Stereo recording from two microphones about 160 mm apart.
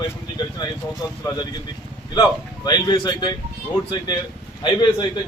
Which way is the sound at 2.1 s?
25° left (ahead or behind).